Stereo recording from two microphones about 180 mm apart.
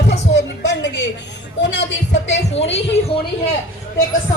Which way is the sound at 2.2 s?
40° left (ahead or behind).